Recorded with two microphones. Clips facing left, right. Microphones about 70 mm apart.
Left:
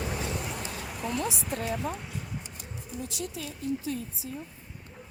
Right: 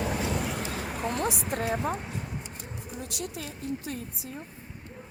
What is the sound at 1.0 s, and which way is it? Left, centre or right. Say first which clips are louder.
A woman's voice: right 1 dB; right.